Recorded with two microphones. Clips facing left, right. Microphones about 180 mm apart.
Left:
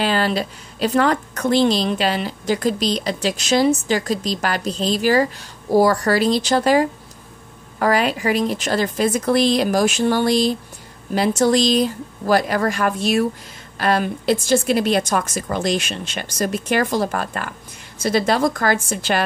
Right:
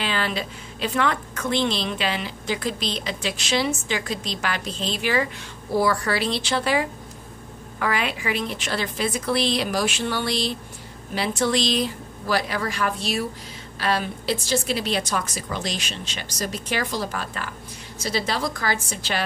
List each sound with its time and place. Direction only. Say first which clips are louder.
0.0 s a woman's voice: left 7 dB; 40° left (ahead or behind)